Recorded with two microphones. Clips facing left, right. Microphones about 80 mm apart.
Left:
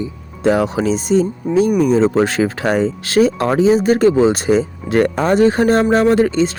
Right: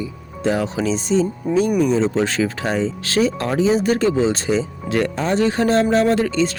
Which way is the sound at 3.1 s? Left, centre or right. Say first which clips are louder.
Left 6 dB; left.